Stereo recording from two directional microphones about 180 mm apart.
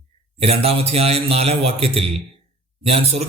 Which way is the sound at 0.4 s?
35° right (ahead or behind).